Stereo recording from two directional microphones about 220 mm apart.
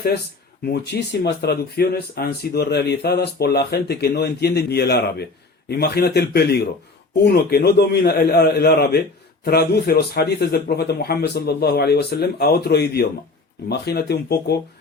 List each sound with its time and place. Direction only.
0.6 s speech: 45° left (ahead or behind)